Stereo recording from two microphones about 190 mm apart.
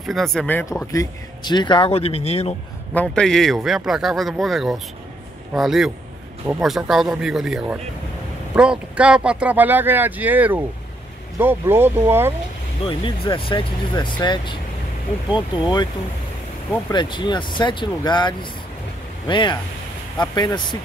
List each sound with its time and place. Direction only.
0.0 s speech: centre (ahead or behind); by 2.5 s 30° left (ahead or behind)
2.9 s speech: 5° left (ahead or behind); by 12.4 s 10° right (ahead or behind)
12.8 s speech: 25° left (ahead or behind)
16.9 s speech: 25° left (ahead or behind)